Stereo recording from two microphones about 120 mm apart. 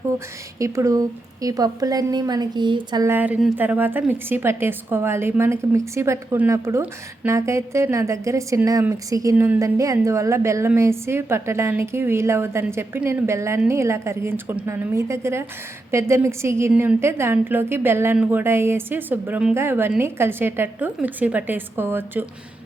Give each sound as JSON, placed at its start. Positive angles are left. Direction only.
{"t": 0.6, "sound": "a woman's voice", "side_deg": -25}
{"t": 3.0, "sound": "a woman's voice", "side_deg": -15}